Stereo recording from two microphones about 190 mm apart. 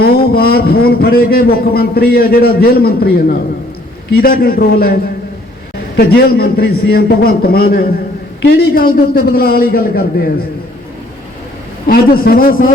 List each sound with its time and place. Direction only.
0.0 s a man's voice: 55° left (ahead or behind)
6.0 s a man's voice: 55° left (ahead or behind)
11.9 s a man's voice: 50° left (ahead or behind)